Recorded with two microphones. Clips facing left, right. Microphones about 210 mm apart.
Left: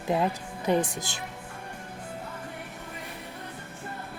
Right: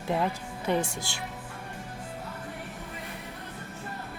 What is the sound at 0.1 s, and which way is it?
Speech, 15° left (ahead or behind).